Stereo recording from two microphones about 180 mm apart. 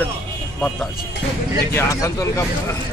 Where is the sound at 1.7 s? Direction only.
15° left (ahead or behind).